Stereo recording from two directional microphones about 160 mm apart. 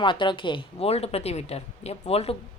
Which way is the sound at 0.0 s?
30° left (ahead or behind).